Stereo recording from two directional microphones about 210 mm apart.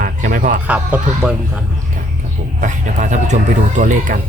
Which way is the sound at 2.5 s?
35° right (ahead or behind).